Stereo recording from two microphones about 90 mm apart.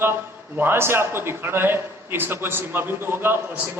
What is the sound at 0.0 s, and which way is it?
A man's voice, 25° right (ahead or behind).